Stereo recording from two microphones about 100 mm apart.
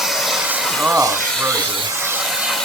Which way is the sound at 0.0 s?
Centre (ahead or behind).